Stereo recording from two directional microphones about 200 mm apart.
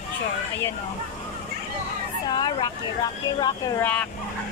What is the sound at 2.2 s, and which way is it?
Speech, 20° left (ahead or behind).